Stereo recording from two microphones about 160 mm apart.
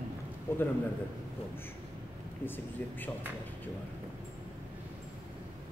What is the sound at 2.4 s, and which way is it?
Speech, 10° left (ahead or behind).